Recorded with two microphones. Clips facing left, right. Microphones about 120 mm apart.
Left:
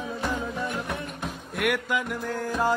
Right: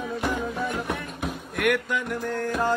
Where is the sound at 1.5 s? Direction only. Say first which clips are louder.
Right 2 dB; centre (ahead or behind).